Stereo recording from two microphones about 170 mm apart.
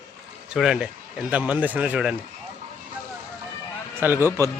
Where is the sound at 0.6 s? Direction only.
5° right (ahead or behind).